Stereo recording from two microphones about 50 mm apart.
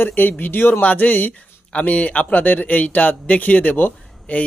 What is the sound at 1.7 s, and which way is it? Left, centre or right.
Speech, left.